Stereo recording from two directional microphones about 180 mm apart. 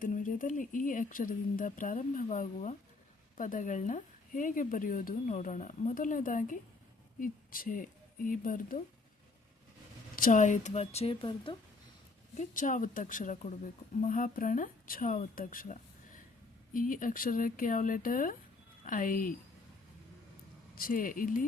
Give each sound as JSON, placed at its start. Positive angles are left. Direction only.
{"t": 0.0, "sound": "speech", "side_deg": 50}
{"t": 10.2, "sound": "a woman's voice", "side_deg": 45}
{"t": 12.4, "sound": "speech", "side_deg": 45}
{"t": 20.7, "sound": "speech", "side_deg": 50}